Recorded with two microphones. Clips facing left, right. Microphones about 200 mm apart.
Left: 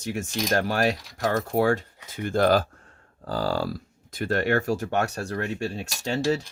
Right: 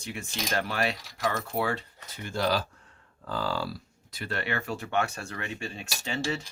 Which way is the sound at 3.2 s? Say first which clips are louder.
Left 5 dB; 40° left (ahead or behind).